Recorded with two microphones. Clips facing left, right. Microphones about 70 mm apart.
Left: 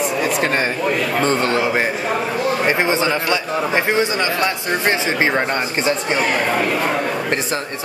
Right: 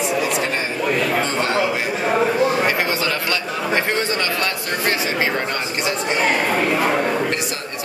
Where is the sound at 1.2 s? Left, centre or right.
Left.